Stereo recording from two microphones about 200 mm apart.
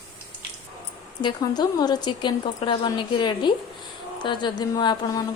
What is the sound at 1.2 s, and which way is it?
A woman's voice, 20° left (ahead or behind).